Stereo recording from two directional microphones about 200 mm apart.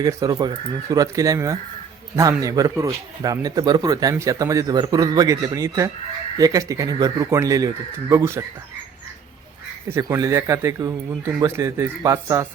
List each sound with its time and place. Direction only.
0.0 s speech: 15° right (ahead or behind)
9.9 s speech: 15° right (ahead or behind)